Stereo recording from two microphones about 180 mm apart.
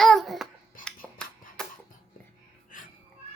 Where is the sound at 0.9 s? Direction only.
5° left (ahead or behind).